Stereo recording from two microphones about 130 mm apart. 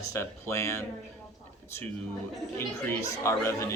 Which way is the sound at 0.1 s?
20° left (ahead or behind).